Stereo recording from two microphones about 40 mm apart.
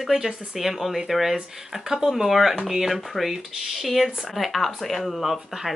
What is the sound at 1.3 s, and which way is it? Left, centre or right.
Speech, centre.